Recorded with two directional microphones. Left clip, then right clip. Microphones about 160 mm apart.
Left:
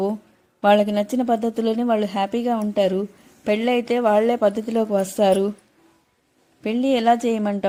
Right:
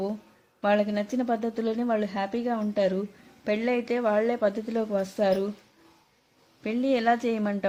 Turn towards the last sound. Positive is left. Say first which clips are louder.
# left 6 dB
turn(degrees=20)  # may be behind; listen again after turning